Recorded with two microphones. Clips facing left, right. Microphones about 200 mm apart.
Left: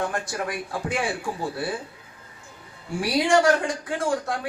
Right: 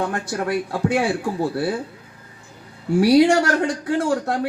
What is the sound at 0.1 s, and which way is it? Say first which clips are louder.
A man's voice: right 6 dB; 65° right (ahead or behind).